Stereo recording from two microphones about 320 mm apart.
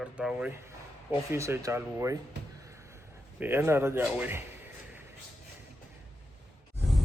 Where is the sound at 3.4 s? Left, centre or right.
Centre.